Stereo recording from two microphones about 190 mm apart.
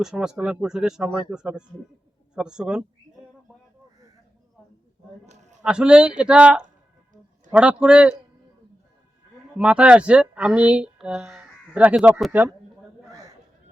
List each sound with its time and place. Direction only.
0.0 s speech: 5° right (ahead or behind)
5.2 s a sound: 35° right (ahead or behind)
5.6 s speech: 5° right (ahead or behind)
9.6 s speech: 5° right (ahead or behind)